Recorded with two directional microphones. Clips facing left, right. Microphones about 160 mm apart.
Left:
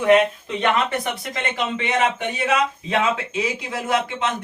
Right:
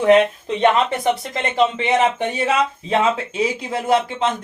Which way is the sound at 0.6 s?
30° right (ahead or behind).